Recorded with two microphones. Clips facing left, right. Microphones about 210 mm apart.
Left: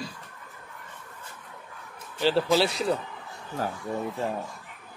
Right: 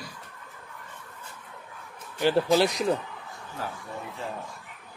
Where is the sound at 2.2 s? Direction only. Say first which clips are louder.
Right 1 dB; 15° right (ahead or behind).